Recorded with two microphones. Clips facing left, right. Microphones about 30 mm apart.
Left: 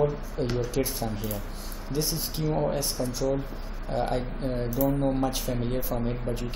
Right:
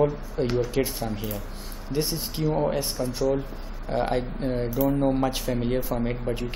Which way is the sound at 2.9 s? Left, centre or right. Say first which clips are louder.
Right 3 dB; centre.